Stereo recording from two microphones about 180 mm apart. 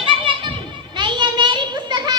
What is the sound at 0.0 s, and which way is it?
Children playing, 25° right (ahead or behind).